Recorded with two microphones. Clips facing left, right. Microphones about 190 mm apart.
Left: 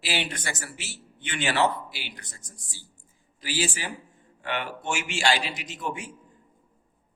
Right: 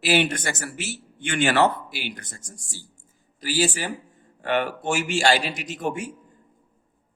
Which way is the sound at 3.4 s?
40° right (ahead or behind).